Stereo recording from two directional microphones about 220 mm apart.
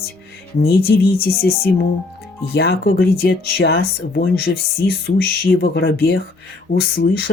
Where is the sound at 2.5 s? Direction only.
45° left (ahead or behind).